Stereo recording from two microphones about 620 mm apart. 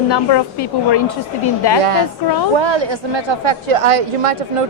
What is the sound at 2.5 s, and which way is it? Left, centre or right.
A woman's voice, right.